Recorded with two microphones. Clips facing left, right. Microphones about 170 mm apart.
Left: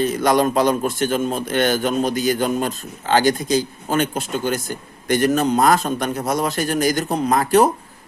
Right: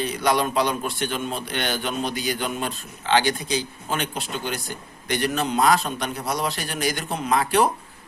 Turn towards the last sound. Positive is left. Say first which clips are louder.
# left 5 dB
turn(degrees=45)  # may be behind; listen again after turning